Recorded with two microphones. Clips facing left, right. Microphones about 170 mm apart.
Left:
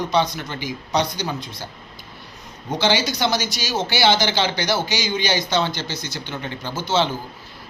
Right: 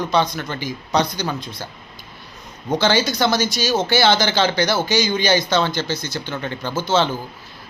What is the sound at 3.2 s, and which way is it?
Speech, 50° right (ahead or behind).